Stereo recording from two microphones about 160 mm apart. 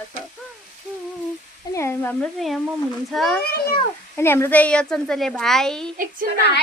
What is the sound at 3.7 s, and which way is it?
Speech, 15° left (ahead or behind).